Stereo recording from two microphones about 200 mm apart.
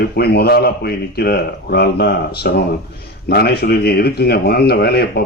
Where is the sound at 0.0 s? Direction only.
55° left (ahead or behind).